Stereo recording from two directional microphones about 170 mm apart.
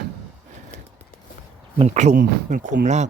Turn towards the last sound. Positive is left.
turn(degrees=-45)  # may be behind; listen again after turning